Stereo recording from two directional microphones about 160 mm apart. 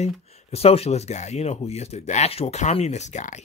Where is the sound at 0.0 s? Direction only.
40° left (ahead or behind).